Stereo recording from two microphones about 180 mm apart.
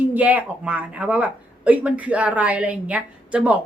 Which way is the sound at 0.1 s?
10° right (ahead or behind).